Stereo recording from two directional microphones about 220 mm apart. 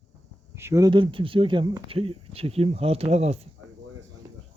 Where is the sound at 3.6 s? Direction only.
80° right.